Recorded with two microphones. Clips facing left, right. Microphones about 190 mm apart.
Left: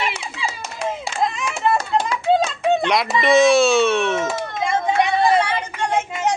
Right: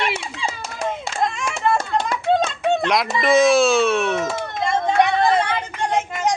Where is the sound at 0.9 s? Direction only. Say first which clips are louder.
Left 1 dB; centre (ahead or behind).